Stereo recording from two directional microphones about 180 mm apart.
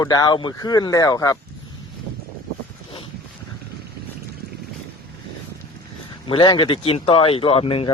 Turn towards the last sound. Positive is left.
turn(degrees=30)  # may be behind; listen again after turning